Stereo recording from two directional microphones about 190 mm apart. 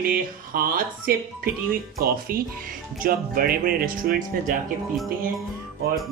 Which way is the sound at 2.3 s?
50° right (ahead or behind).